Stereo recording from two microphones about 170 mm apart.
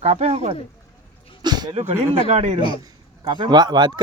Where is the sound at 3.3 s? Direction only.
25° right (ahead or behind).